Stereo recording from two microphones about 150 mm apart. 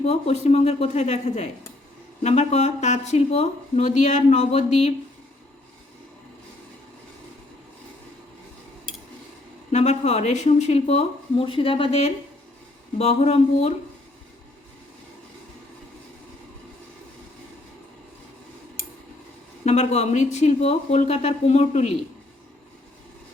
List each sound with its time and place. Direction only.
0.0 s speech: 45° left (ahead or behind)
9.7 s speech: 50° left (ahead or behind)
19.6 s speech: 50° left (ahead or behind)